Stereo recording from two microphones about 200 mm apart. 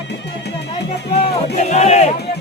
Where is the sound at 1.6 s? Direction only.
35° left (ahead or behind).